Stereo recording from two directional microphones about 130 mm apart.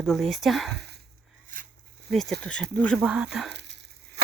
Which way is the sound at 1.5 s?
90° right.